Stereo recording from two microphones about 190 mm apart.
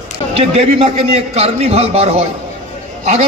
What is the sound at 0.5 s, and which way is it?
A man's voice, 30° right (ahead or behind).